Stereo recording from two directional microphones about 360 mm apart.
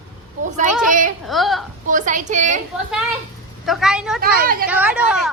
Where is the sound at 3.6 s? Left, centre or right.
Centre.